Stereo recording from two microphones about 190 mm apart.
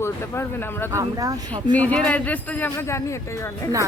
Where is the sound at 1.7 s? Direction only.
5° left (ahead or behind).